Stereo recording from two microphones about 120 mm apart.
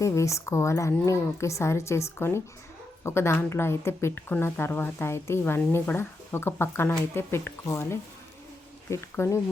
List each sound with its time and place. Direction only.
0.0 s speech: 25° left (ahead or behind)